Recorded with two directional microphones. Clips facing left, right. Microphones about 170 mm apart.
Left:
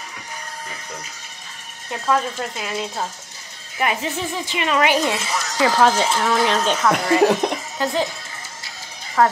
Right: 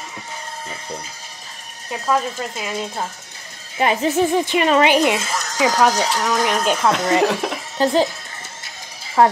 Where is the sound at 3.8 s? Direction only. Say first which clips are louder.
Right 4 dB; 25° right (ahead or behind).